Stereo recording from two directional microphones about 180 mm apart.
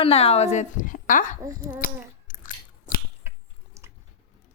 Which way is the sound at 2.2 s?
50° left (ahead or behind).